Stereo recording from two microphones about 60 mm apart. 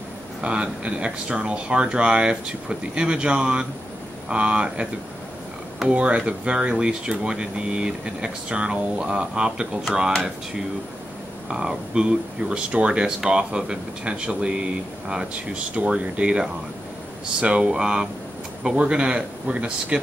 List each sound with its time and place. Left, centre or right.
0.4 s speech: centre
5.9 s speech: centre
11.4 s speech: centre